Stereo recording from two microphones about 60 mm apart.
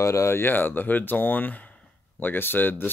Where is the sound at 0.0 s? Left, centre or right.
Left.